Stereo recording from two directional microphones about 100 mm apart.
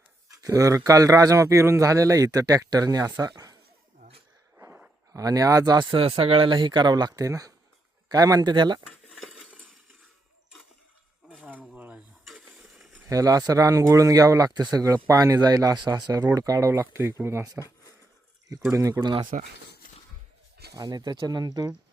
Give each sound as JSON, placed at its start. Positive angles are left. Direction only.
{"t": 0.4, "sound": "speech", "side_deg": -30}
{"t": 5.1, "sound": "speech", "side_deg": -35}
{"t": 5.9, "sound": "speech", "side_deg": -70}
{"t": 9.0, "sound": "stir", "side_deg": 0}
{"t": 11.3, "sound": "a sound", "side_deg": -5}
{"t": 11.8, "sound": "dishes", "side_deg": -15}
{"t": 12.2, "sound": "a sound", "side_deg": 0}
{"t": 13.1, "sound": "speech", "side_deg": -35}
{"t": 18.7, "sound": "speech", "side_deg": -35}
{"t": 20.7, "sound": "speech", "side_deg": -40}